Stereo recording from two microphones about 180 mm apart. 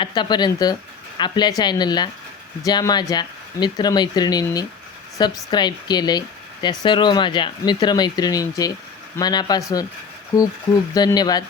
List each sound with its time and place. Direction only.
0.0 s speech: 25° left (ahead or behind)
10.9 s speech: 20° left (ahead or behind)